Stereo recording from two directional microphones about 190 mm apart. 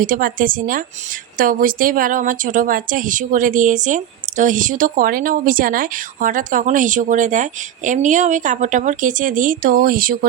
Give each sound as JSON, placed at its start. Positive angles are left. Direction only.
{"t": 0.0, "sound": "speech", "side_deg": -45}